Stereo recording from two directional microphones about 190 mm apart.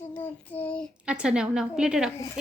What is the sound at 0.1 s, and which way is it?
Child singing, 10° left (ahead or behind).